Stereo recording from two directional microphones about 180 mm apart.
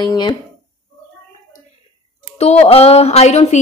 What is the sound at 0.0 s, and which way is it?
Speech, 25° left (ahead or behind).